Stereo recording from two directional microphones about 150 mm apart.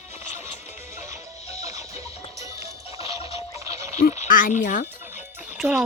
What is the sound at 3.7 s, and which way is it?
Frog, 20° right (ahead or behind).